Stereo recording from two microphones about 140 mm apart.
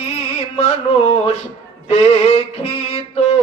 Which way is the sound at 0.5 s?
50° left (ahead or behind).